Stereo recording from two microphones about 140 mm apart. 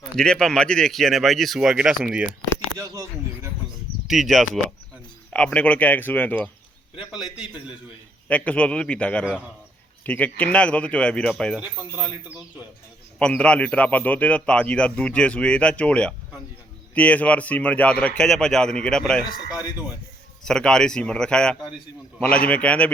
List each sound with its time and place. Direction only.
0.2 s speech: 5° left (ahead or behind)
2.7 s a sound: 25° right (ahead or behind)
4.0 s a man's voice: centre (ahead or behind)
7.1 s speech: 5° right (ahead or behind)
8.3 s a man's voice: 10° left (ahead or behind)
11.6 s speech: 10° right (ahead or behind)
13.1 s a man's voice: 10° left (ahead or behind)
20.4 s a man's voice: 5° left (ahead or behind)